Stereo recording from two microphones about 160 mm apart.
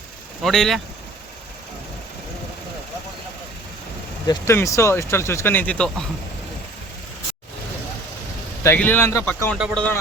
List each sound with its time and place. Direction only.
0.4 s a man's voice: centre (ahead or behind)
4.3 s speech: 15° left (ahead or behind)
8.6 s a man's voice: 15° left (ahead or behind)